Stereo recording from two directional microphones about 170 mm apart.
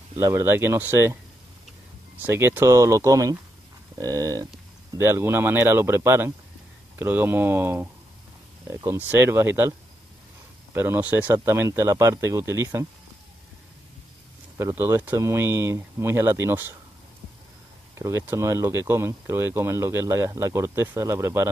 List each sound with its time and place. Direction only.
0.2 s speech: 15° right (ahead or behind)
2.2 s speech: 15° right (ahead or behind)
14.6 s speech: 15° right (ahead or behind)
17.9 s speech: 15° right (ahead or behind)